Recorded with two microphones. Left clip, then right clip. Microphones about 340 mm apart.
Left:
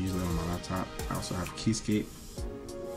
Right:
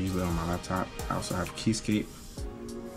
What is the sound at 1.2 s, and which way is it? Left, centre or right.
Speech, centre.